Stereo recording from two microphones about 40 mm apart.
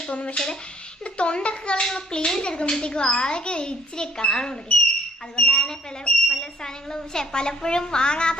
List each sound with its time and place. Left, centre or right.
0.1 s a child's voice: left
1.8 s a child's voice: centre